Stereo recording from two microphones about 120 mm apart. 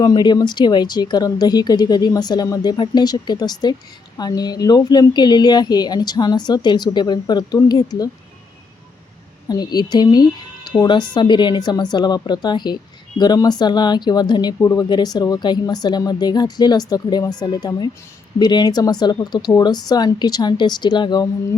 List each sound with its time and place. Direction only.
0.0 s speech: 35° left (ahead or behind)
9.5 s speech: 35° left (ahead or behind)